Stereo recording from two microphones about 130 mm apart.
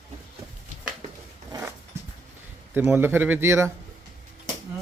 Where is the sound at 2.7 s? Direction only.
15° right (ahead or behind).